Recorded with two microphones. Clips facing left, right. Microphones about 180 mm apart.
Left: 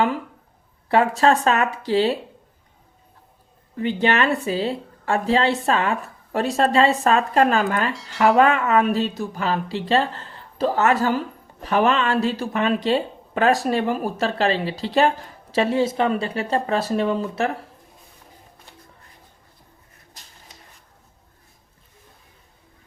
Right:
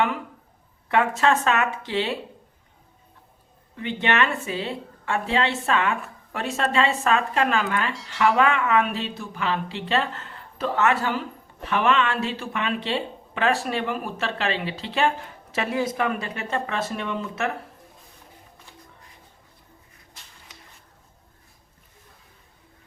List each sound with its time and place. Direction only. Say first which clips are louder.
0.9 s speech: left 4 dB; 35° left (ahead or behind)
3.8 s speech: left 4 dB; 35° left (ahead or behind)
7.9 s speech: left 1 dB; centre (ahead or behind)
8.4 s speech: left 4 dB; 40° left (ahead or behind)
20.2 s a sound: left 1 dB; 40° left (ahead or behind)